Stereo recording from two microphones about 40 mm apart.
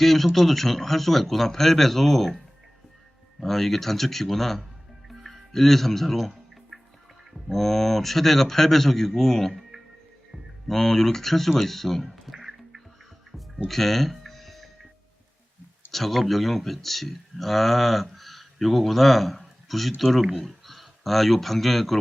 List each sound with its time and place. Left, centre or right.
0.0 s speech: centre
3.4 s speech: centre
7.5 s a man's voice: centre
9.5 s music: centre
10.7 s a man's voice: centre
12.3 s music: centre
13.7 s music: centre
15.9 s speech: centre